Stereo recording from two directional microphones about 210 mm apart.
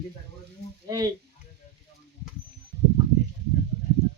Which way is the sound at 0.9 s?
15° right (ahead or behind).